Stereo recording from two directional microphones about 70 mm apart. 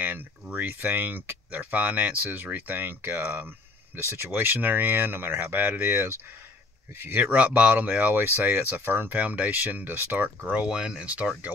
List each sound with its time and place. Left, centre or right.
0.0 s speech: right
7.3 s speech: centre
10.6 s speech: centre